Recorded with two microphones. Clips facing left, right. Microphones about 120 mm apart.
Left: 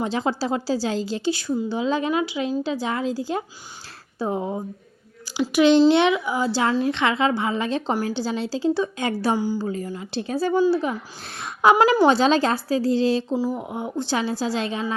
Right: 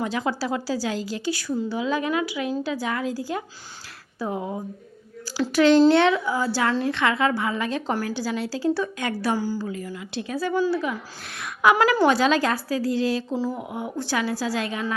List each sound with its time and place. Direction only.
0.0 s a woman's voice: 25° left (ahead or behind)
9.6 s a woman's voice: 30° left (ahead or behind)
11.8 s a woman's voice: 15° left (ahead or behind)
13.3 s speech: 15° left (ahead or behind)
13.6 s a woman's voice: 25° left (ahead or behind)